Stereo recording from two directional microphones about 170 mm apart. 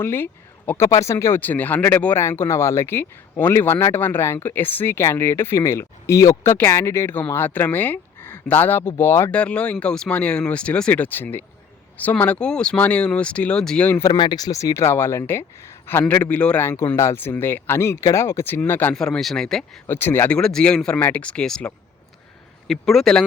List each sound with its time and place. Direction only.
0.0 s speech: 10° left (ahead or behind)
14.0 s speech: 25° left (ahead or behind); by 23.2 s centre (ahead or behind)